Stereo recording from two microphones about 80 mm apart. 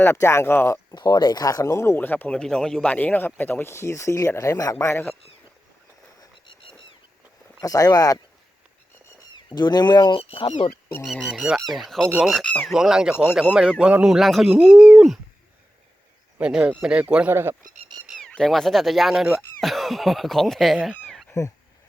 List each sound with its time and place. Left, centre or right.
0.0 s speech: left
0.9 s speech: left
2.0 s speech: left
2.9 s speech: left
3.7 s speech: left
6.4 s a sound: left
7.6 s speech: left
9.3 s speech: left
11.1 s speech: centre
16.4 s speech: centre
17.2 s speech: right
18.3 s speech: centre
20.9 s a sound: centre